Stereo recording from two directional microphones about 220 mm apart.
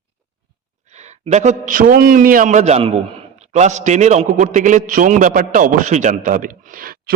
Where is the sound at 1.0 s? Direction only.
30° right (ahead or behind).